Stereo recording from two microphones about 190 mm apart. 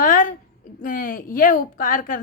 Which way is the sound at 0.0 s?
45° left (ahead or behind).